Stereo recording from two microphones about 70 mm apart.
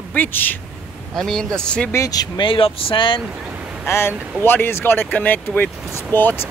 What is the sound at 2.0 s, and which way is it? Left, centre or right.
Speech, left.